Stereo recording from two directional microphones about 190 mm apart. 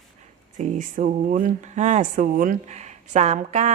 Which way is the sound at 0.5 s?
40° right (ahead or behind).